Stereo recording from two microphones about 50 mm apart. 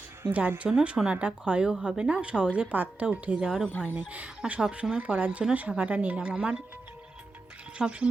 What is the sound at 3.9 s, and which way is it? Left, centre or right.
Speech, right.